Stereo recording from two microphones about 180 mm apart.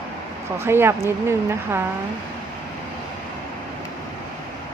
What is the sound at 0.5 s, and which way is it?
Speech, 15° right (ahead or behind).